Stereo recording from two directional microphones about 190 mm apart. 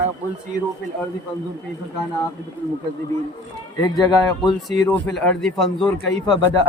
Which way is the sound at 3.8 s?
20° left (ahead or behind).